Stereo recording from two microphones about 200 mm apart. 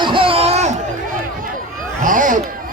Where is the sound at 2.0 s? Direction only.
40° right (ahead or behind).